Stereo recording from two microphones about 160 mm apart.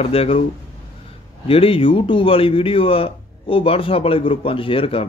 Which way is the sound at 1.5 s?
35° left (ahead or behind).